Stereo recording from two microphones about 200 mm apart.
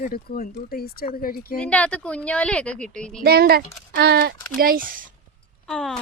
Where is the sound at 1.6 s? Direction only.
5° left (ahead or behind).